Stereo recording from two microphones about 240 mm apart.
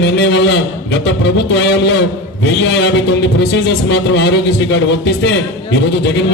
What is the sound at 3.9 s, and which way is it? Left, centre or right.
A man's voice, left.